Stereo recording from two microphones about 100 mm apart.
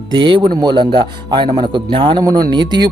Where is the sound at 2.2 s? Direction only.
45° right (ahead or behind).